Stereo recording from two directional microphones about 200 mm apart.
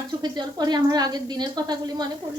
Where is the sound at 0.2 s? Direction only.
20° right (ahead or behind).